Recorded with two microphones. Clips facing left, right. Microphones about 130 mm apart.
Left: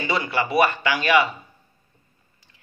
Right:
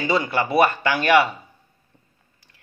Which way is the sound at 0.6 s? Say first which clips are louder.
Right 2 dB; 45° right (ahead or behind).